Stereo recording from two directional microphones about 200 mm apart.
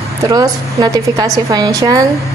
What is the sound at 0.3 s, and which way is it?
A woman's voice, 20° right (ahead or behind).